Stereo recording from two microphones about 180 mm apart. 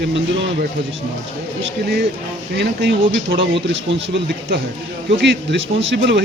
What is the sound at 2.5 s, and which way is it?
Speech, 75° right (ahead or behind).